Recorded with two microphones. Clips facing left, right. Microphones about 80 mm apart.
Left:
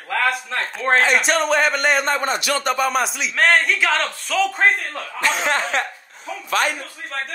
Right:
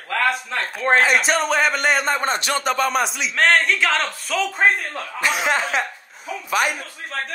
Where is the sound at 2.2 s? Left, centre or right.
Right.